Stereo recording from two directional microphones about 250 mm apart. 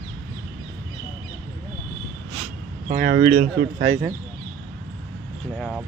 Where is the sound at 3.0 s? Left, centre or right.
Right.